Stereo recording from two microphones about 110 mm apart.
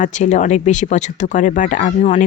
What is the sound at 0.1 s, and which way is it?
Speech, 90° left.